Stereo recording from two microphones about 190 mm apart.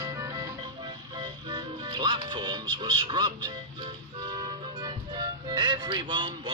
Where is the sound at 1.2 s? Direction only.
20° right (ahead or behind).